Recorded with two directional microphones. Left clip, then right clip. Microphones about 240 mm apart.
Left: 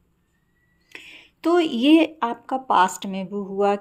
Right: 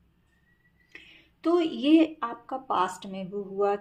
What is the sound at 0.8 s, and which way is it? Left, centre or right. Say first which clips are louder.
A woman's voice: left 8 dB; left.